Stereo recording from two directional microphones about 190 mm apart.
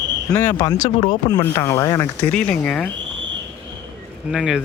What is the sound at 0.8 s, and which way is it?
Speech, 30° left (ahead or behind).